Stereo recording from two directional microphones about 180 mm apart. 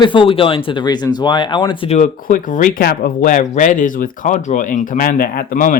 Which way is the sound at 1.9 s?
45° left (ahead or behind).